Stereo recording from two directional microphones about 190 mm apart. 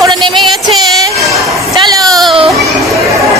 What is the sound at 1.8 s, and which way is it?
Speech, 20° right (ahead or behind).